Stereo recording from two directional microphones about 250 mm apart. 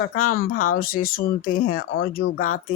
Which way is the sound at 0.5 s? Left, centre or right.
Left.